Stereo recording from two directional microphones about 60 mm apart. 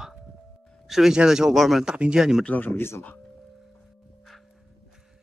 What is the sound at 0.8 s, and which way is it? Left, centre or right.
A man's voice, centre.